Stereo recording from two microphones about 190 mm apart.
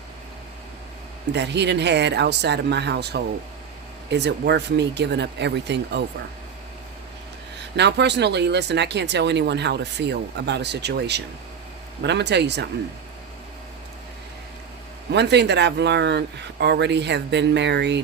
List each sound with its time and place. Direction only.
1.3 s speech: 65° right (ahead or behind)
7.8 s speech: 65° right (ahead or behind)
15.1 s speech: 65° right (ahead or behind)